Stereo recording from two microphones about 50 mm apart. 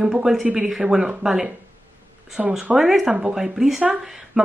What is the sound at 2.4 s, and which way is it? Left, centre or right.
Speech, right.